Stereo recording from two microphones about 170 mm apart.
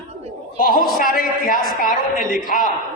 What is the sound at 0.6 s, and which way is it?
A man's voice, 55° left (ahead or behind).